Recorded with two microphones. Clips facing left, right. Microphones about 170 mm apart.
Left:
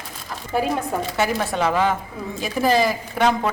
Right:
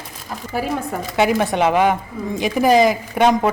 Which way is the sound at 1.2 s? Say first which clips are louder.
Right 7 dB; 20° right (ahead or behind).